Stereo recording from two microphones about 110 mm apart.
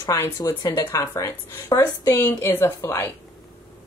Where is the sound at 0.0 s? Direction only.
30° left (ahead or behind).